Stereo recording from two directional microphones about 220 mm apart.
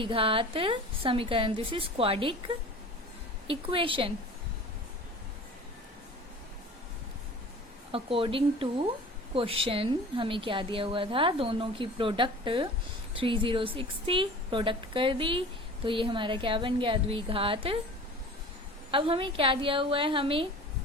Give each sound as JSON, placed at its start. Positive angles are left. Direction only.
{"t": 0.0, "sound": "a woman's voice", "side_deg": -25}
{"t": 3.4, "sound": "a woman's voice", "side_deg": -25}
{"t": 7.9, "sound": "a woman's voice", "side_deg": -25}
{"t": 18.9, "sound": "a woman's voice", "side_deg": -25}